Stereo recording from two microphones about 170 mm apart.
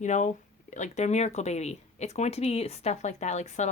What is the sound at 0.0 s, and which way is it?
Speech, 45° left (ahead or behind).